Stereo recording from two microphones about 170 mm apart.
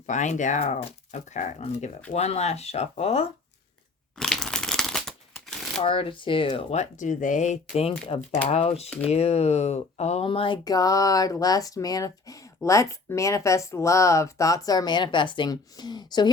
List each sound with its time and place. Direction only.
0.1 s speech: 45° left (ahead or behind)
4.2 s crumpling: 5° left (ahead or behind)
5.8 s speech: 30° left (ahead or behind)